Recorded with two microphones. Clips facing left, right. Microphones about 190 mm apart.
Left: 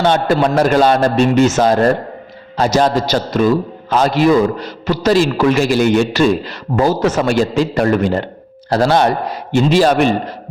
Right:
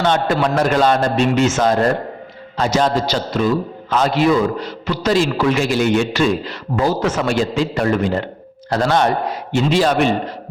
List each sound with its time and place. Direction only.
0.0 s a man's voice: 35° left (ahead or behind)